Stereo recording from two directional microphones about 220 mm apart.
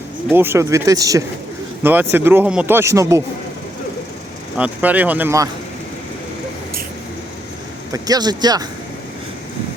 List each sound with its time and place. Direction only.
0.3 s speech: 10° right (ahead or behind)
4.5 s speech: 5° right (ahead or behind)
7.9 s speech: 15° right (ahead or behind)